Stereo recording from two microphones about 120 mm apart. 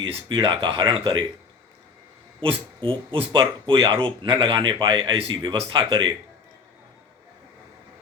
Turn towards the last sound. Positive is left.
turn(degrees=-45)  # may be behind; listen again after turning